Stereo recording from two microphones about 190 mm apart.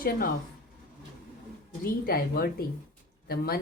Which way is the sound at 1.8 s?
50° left (ahead or behind).